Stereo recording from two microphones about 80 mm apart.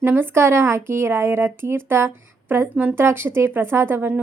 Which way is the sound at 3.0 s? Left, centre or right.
Right.